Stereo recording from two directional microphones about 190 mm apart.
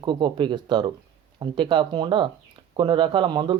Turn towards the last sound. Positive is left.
turn(degrees=-25)  # may be behind; listen again after turning